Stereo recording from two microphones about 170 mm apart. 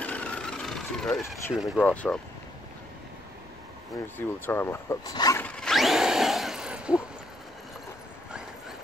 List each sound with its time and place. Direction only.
0.0 s vehicle: 5° left (ahead or behind)
1.8 s speech: 10° left (ahead or behind)
4.5 s speech: 15° left (ahead or behind)
5.4 s a sound: 5° left (ahead or behind)
8.3 s dog: 5° right (ahead or behind)